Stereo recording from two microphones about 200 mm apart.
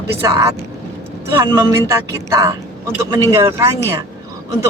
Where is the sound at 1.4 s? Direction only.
20° right (ahead or behind).